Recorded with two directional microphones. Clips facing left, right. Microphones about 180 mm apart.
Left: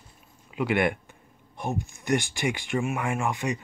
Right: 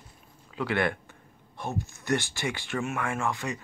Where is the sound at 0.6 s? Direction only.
15° left (ahead or behind).